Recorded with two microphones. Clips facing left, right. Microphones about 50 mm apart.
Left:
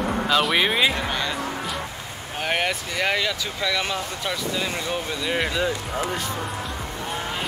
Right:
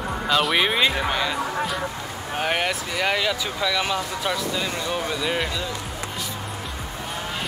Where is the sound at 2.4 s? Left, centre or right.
Centre.